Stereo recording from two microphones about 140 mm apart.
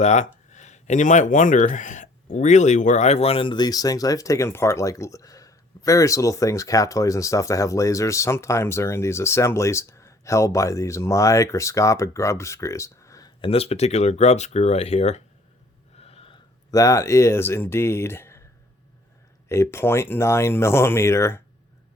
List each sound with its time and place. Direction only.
0.0 s speech: 55° left (ahead or behind); by 13.3 s 25° left (ahead or behind)
13.4 s speech: 45° left (ahead or behind)
16.0 s snort: 45° left (ahead or behind)
16.7 s speech: 25° left (ahead or behind)
19.5 s speech: 20° left (ahead or behind)